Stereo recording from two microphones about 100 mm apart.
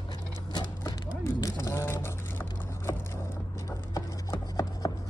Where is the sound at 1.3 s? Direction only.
30° left (ahead or behind).